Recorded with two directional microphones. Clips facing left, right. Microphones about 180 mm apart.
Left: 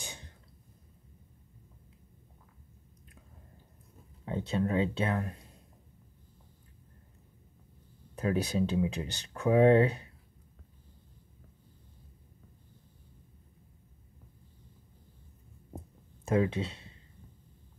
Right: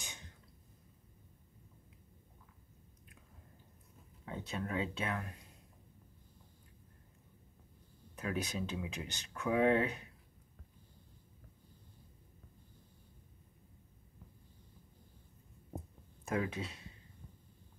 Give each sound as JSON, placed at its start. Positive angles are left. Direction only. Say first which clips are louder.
{"t": 0.0, "sound": "cough", "louder": "left 6 dB", "side_deg": 30}
{"t": 4.3, "sound": "speech", "louder": "left 9 dB", "side_deg": 30}
{"t": 8.2, "sound": "speech", "louder": "left 9 dB", "side_deg": 30}
{"t": 16.3, "sound": "speech", "louder": "left 8 dB", "side_deg": 25}